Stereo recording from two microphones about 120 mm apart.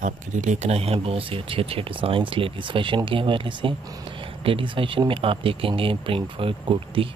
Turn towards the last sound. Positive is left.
turn(degrees=-45)  # may be behind; listen again after turning